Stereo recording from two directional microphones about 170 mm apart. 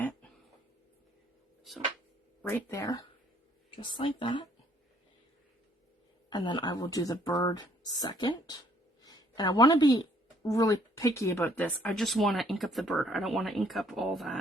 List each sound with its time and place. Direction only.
2.5 s speech: 15° left (ahead or behind)
3.7 s speech: 30° left (ahead or behind)
6.3 s speech: 25° left (ahead or behind); by 14.3 s centre (ahead or behind)